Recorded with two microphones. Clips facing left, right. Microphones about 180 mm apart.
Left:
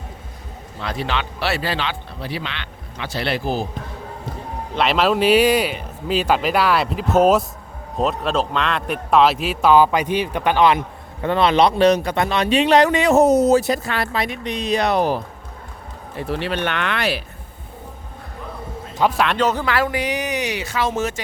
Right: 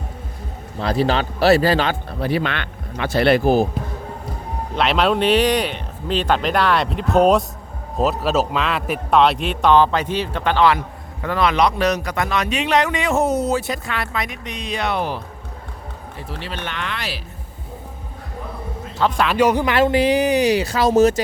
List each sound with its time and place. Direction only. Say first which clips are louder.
0.8 s speech: right 6 dB; 35° right (ahead or behind); by 3.7 s 55° right (ahead or behind)
4.7 s a man's voice: even; centre (ahead or behind); by 15.2 s 40° left (ahead or behind)
16.1 s speech: left 8 dB; 65° left (ahead or behind)
19.1 s speech: even; centre (ahead or behind)
19.4 s speech: right 7 dB; 15° right (ahead or behind); by 21.2 s 40° right (ahead or behind)